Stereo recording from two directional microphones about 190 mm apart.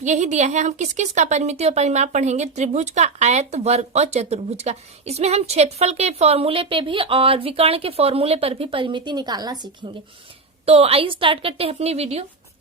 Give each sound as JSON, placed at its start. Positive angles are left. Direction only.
{"t": 0.0, "sound": "a woman's voice", "side_deg": -40}
{"t": 10.7, "sound": "a woman's voice", "side_deg": -30}